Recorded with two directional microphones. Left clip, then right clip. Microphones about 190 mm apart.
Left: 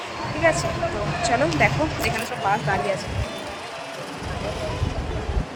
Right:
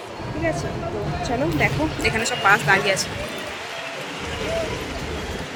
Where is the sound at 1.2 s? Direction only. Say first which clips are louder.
Left 2 dB; 5° right (ahead or behind).